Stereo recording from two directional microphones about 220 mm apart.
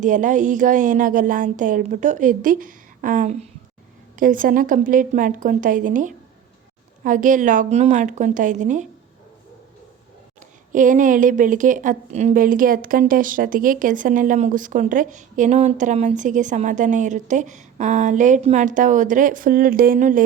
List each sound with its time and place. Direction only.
0.0 s speech: 35° right (ahead or behind)
10.7 s speech: 35° right (ahead or behind)